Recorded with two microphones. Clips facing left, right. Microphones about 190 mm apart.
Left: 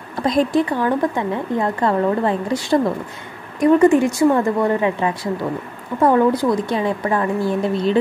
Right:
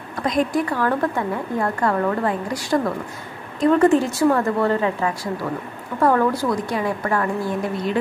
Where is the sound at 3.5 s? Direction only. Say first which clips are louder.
Left 3 dB; 10° left (ahead or behind).